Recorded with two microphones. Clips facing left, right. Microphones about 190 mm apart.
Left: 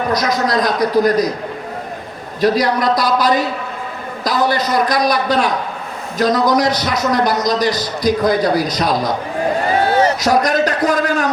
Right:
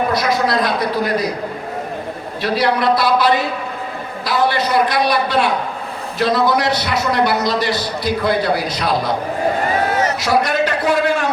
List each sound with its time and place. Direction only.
0.1 s a man's voice: 40° left (ahead or behind)
2.4 s a man's voice: 40° left (ahead or behind)
9.9 s a sound: 30° left (ahead or behind)